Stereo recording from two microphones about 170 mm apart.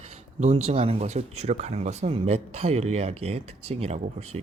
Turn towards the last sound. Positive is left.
turn(degrees=-35)  # may be behind; listen again after turning